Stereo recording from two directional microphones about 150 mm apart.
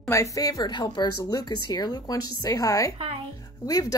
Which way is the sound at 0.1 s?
20° left (ahead or behind).